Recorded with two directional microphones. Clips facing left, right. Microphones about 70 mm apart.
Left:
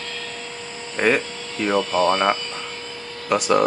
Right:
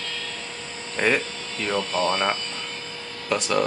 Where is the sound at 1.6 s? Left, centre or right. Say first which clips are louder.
Left 5 dB; left.